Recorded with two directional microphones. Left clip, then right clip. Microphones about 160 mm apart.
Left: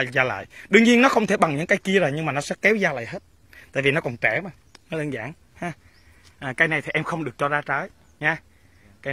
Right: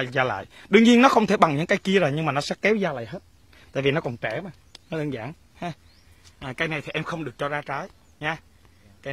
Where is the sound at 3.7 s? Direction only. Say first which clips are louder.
Left 2 dB; 10° right (ahead or behind).